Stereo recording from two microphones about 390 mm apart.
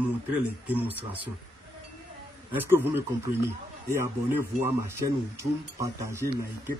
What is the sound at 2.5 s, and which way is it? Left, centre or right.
Speech, centre.